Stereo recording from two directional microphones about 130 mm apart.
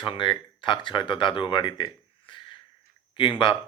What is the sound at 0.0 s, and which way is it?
Speech, 40° left (ahead or behind).